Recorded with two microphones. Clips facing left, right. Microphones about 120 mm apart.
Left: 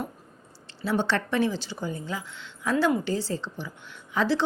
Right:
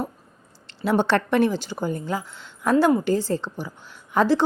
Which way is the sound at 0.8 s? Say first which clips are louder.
Right 5 dB; 55° right (ahead or behind).